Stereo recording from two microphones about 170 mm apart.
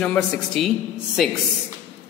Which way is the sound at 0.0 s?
5° left (ahead or behind).